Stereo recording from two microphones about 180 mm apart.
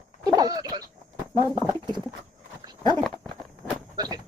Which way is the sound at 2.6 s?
25° right (ahead or behind).